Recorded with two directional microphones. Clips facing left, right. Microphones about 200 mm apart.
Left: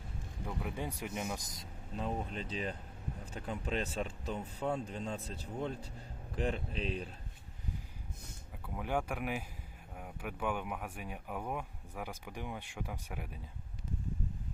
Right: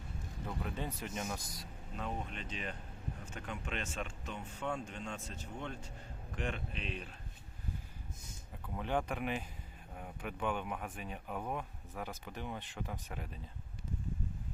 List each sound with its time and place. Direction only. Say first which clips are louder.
0.4 s speech: left 1 dB; 10° left (ahead or behind)
1.5 s speech: left 3 dB; 30° left (ahead or behind)
8.6 s speech: even; 10° left (ahead or behind)